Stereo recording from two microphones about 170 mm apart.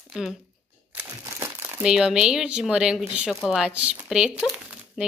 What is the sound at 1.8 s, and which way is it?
Speech, 5° right (ahead or behind).